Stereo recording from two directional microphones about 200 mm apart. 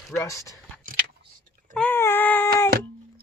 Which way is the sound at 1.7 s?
5° left (ahead or behind).